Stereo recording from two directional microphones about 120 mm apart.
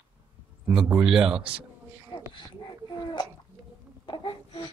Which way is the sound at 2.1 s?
40° left (ahead or behind).